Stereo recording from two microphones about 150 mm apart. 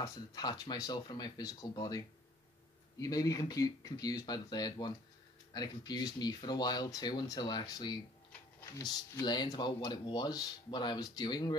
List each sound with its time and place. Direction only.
0.0 s speech: 25° left (ahead or behind)